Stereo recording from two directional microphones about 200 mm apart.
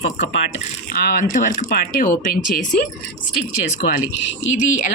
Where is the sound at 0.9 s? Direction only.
45° left (ahead or behind).